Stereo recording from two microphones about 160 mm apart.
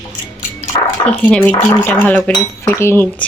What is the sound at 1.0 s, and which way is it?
Cutlery, 5° left (ahead or behind).